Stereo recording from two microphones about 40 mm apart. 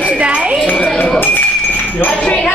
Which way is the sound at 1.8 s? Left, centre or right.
Left.